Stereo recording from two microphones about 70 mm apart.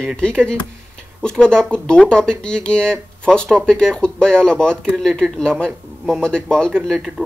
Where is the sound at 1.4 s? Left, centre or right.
Centre.